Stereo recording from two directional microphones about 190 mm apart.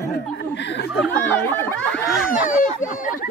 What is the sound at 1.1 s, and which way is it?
Speech, 10° left (ahead or behind).